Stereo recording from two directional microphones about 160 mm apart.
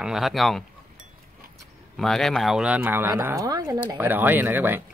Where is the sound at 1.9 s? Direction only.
Centre (ahead or behind); by 4.0 s 20° right (ahead or behind).